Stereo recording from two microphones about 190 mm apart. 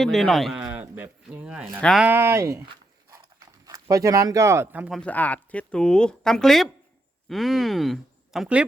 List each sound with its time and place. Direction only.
0.0 s speech: centre (ahead or behind)
0.7 s a sound: 10° right (ahead or behind)
1.8 s speech: centre (ahead or behind)
2.0 s speech: 10° right (ahead or behind)
3.7 s speech: 15° right (ahead or behind)
4.9 s speech: 10° left (ahead or behind)